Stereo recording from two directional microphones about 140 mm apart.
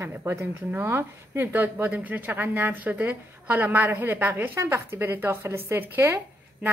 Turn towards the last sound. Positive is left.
turn(degrees=-10)  # may be behind; listen again after turning